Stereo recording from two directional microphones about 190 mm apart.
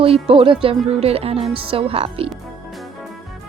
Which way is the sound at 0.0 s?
30° right (ahead or behind).